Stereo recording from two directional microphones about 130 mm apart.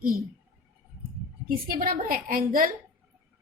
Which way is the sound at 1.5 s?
90° right.